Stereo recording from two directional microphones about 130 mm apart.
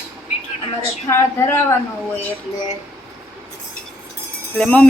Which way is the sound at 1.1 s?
20° left (ahead or behind).